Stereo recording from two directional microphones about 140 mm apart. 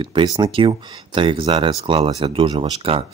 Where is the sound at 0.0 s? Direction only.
35° right (ahead or behind).